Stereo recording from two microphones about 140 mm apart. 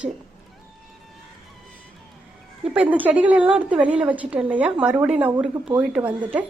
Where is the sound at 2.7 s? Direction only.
10° right (ahead or behind).